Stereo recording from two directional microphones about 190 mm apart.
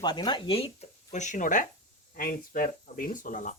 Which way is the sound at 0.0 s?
20° left (ahead or behind).